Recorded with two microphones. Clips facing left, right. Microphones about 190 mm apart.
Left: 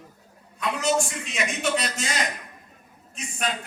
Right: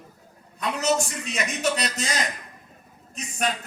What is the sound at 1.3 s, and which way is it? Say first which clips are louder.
Speech: even; 40° right (ahead or behind).